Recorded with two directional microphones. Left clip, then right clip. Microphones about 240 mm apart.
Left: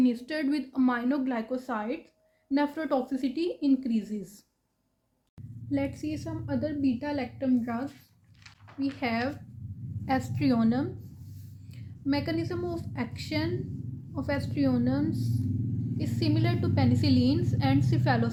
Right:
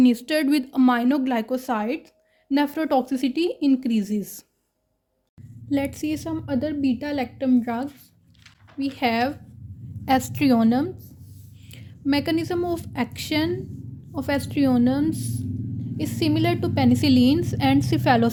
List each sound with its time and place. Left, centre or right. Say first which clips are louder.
0.0 s a woman's voice: right 8 dB; right
5.7 s a woman's voice: right 6 dB; right